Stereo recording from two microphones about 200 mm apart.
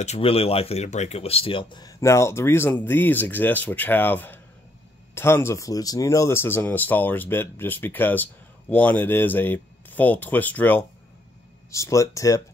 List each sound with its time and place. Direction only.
0.0 s speech: 30° left (ahead or behind); by 12.4 s 15° left (ahead or behind)